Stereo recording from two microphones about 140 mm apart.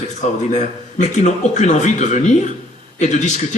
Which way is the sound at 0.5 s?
60° left (ahead or behind).